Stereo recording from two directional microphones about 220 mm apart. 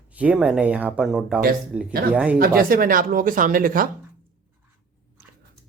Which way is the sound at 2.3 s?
40° right (ahead or behind).